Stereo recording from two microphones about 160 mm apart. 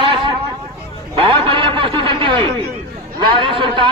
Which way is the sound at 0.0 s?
30° right (ahead or behind).